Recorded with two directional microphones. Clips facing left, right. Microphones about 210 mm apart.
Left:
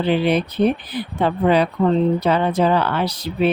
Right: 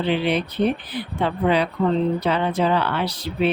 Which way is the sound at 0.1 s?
45° left (ahead or behind).